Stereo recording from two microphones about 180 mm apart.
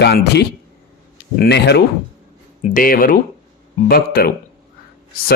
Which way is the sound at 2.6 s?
50° left (ahead or behind).